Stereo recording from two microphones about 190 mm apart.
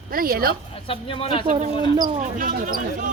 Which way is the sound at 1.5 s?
35° right (ahead or behind).